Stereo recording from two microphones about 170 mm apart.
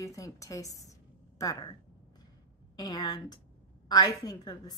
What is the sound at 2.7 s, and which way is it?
A woman's voice, 20° left (ahead or behind).